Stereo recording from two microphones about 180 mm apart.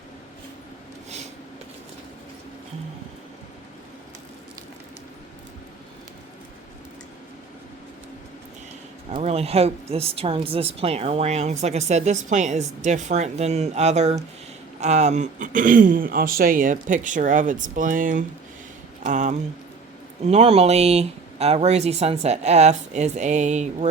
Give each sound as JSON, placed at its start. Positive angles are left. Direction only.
{"t": 9.1, "sound": "speech", "side_deg": -35}